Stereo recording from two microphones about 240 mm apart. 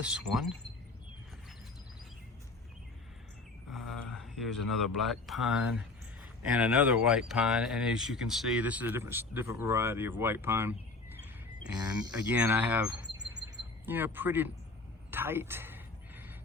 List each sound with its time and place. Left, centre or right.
0.0 s speech: centre
3.7 s speech: centre
15.1 s a sound: centre